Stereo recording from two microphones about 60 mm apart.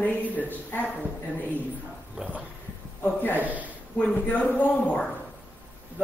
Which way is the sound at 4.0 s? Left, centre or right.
Left.